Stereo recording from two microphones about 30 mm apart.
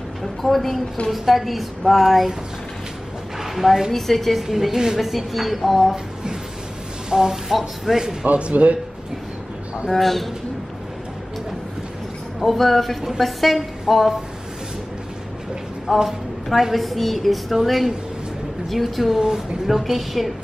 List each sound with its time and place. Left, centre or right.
0.2 s a woman's voice: centre
3.3 s a sound: centre
3.9 s a woman's voice: centre
4.4 s a woman's voice: centre
7.1 s speech: centre
7.5 s a woman's voice: centre
8.0 s speech: centre
8.3 s speech: right
9.8 s a woman's voice: centre
12.4 s a woman's voice: centre
15.9 s a woman's voice: centre
18.7 s a woman's voice: centre
19.1 s a woman's voice: centre
19.7 s a woman's voice: centre